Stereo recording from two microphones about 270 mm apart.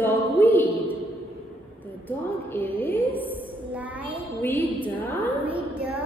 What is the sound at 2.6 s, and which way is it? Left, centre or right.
Speech, left.